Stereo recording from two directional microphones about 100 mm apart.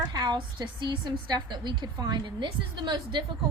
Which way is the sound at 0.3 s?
50° right (ahead or behind).